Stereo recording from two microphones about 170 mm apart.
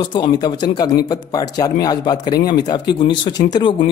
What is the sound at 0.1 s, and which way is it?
A man's voice, 25° left (ahead or behind).